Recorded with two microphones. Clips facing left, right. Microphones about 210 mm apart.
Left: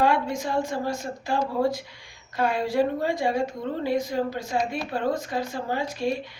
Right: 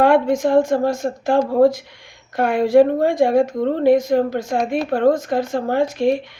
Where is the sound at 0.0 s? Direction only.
55° right (ahead or behind).